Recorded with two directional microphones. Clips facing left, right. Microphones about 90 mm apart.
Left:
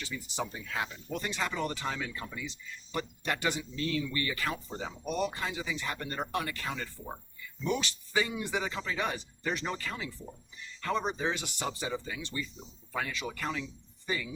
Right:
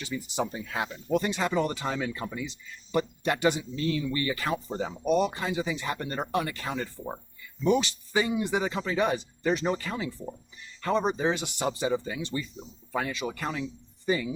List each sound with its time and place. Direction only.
0.1 s speech: 35° right (ahead or behind)